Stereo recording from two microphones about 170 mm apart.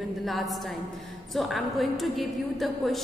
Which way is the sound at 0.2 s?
Centre (ahead or behind).